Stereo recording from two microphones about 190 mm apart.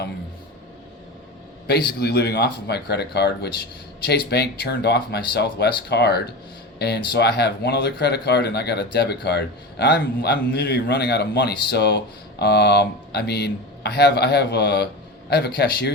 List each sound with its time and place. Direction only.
1.6 s speech: 55° left (ahead or behind)